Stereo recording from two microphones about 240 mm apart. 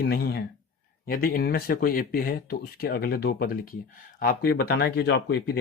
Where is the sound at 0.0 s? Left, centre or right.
Left.